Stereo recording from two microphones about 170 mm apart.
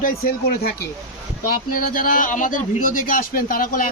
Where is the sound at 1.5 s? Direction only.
55° left (ahead or behind).